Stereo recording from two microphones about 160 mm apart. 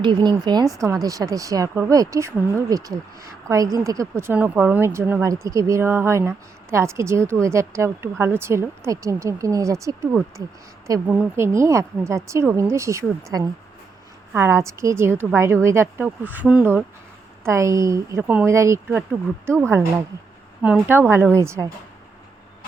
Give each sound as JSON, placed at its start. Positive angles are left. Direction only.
{"t": 0.0, "sound": "speech", "side_deg": -30}